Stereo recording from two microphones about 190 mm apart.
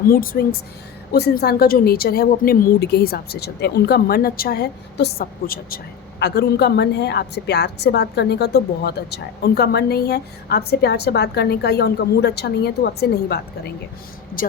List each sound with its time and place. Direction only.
0.1 s a woman's voice: 50° left (ahead or behind)